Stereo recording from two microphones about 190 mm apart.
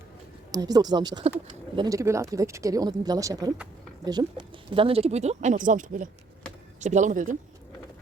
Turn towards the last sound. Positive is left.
turn(degrees=-45)  # may be behind; listen again after turning